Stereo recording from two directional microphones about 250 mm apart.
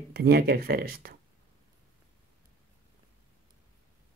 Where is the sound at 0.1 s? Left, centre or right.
Right.